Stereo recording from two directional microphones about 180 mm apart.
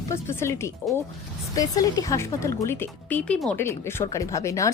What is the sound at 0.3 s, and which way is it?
Speech, 15° left (ahead or behind).